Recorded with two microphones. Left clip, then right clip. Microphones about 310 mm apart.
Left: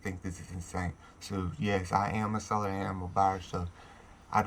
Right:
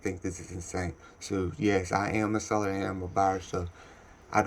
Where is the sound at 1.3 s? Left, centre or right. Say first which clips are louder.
Right 5 dB; left.